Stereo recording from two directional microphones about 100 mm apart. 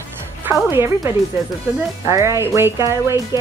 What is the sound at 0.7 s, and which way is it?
Speech, 25° right (ahead or behind).